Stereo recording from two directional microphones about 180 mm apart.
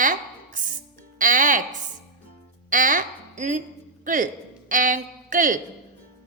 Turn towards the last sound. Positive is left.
turn(degrees=-45)  # may be behind; listen again after turning